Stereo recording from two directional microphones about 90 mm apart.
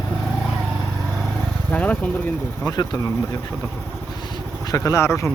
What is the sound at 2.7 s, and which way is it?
Speech, 40° left (ahead or behind).